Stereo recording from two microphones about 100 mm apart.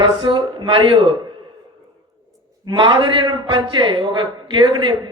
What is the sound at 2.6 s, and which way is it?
A man's voice, 50° right (ahead or behind).